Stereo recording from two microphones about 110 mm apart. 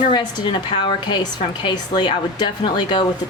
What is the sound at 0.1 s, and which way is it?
A woman's voice, 45° left (ahead or behind).